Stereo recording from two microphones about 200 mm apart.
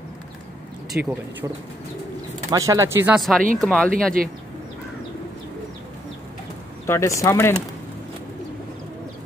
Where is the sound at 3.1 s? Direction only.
Centre (ahead or behind).